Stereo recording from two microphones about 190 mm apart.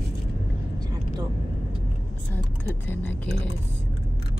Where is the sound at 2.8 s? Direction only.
10° left (ahead or behind).